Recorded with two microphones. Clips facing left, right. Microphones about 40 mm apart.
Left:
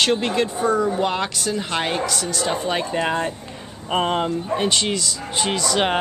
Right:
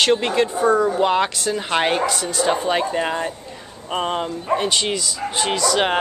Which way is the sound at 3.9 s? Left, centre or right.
Centre.